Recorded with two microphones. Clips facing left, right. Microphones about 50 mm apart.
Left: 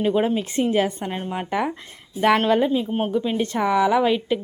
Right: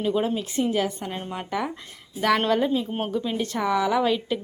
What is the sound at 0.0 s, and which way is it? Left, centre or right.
A woman's voice, left.